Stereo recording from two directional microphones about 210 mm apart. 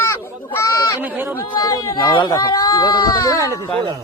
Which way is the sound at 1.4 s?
15° left (ahead or behind).